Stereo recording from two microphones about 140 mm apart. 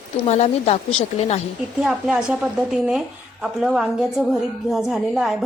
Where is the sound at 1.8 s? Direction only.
5° right (ahead or behind).